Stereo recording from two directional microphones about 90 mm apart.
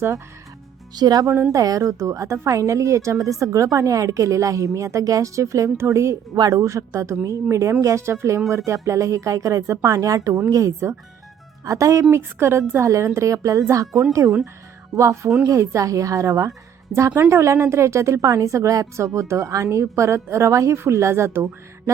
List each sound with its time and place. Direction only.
0.9 s a woman's voice: 45° right (ahead or behind)
6.3 s speech: 45° right (ahead or behind)
6.6 s a woman's voice: 35° right (ahead or behind)
14.2 s a woman's voice: 20° right (ahead or behind)
14.9 s a woman's voice: 35° right (ahead or behind)